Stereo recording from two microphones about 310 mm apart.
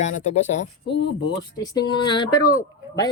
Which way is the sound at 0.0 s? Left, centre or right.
Left.